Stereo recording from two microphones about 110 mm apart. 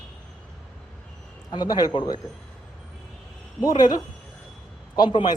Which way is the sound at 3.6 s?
40° left (ahead or behind).